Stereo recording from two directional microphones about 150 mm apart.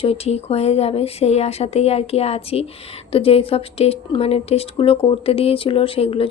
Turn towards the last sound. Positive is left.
turn(degrees=40)  # may be behind; listen again after turning